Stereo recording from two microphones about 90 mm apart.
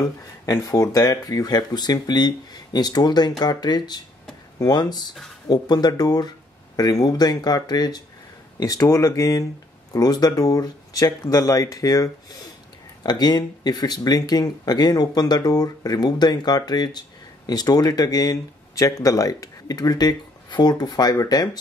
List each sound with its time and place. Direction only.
0.5 s speech: 35° left (ahead or behind)
13.0 s speech: 50° left (ahead or behind)